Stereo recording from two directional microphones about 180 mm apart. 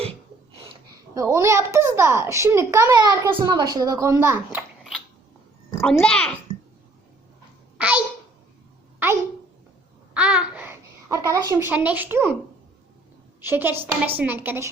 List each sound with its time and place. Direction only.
1.1 s a child's voice: 15° right (ahead or behind)
4.8 s a sound: centre (ahead or behind)
5.8 s a child's voice: 5° left (ahead or behind)
7.8 s babbling: 5° right (ahead or behind)
10.2 s babbling: 5° right (ahead or behind)
11.7 s a child's voice: 10° right (ahead or behind)
13.4 s a child's voice: 10° right (ahead or behind)